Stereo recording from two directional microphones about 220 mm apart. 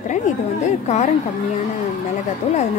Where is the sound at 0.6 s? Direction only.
30° left (ahead or behind).